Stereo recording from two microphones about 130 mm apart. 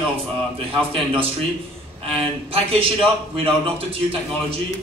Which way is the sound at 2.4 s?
45° right (ahead or behind).